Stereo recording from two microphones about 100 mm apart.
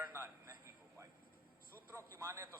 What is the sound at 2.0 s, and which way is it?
Speech, 30° right (ahead or behind).